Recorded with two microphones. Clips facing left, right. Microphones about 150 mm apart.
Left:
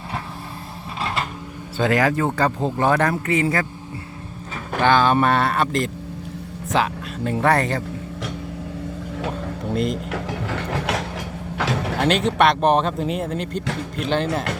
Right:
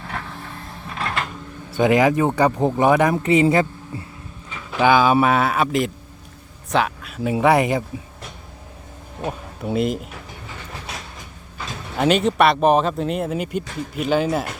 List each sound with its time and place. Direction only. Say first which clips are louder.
1.0 s a sound: even; centre (ahead or behind)
1.7 s speech: right 3 dB; 15° right (ahead or behind)
4.8 s speech: right 2 dB; 10° right (ahead or behind)
7.3 s speech: right 3 dB; 10° right (ahead or behind)
9.6 s speech: right 2 dB; 5° right (ahead or behind)
10.1 s a sound: left 11 dB; 80° left
11.5 s sliding door: left 10 dB; 80° left
11.9 s speech: right 3 dB; 5° right (ahead or behind)